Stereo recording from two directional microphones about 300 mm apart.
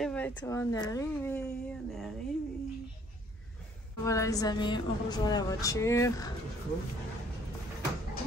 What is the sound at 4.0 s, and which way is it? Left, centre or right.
A woman's voice, centre.